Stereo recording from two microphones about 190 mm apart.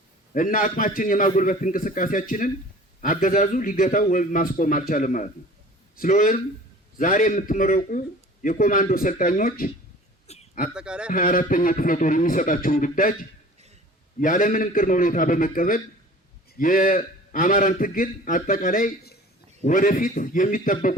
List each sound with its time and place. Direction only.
0.3 s a man's voice: 45° left (ahead or behind)
10.2 s a sound: 35° left (ahead or behind)
10.8 s a man's voice: 5° right (ahead or behind)
11.1 s a man's voice: 50° left (ahead or behind)
14.2 s a man's voice: 45° left (ahead or behind)